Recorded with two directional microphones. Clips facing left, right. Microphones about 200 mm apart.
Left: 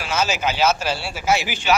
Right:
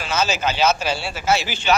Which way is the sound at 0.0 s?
10° left (ahead or behind).